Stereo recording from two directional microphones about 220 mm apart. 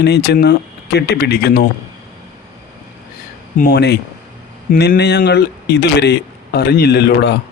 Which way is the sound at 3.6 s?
45° left (ahead or behind).